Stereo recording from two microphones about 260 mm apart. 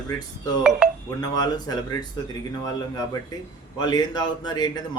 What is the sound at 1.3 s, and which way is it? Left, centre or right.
Speech, centre.